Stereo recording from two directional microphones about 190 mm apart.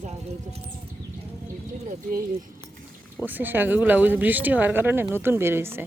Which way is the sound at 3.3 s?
10° right (ahead or behind).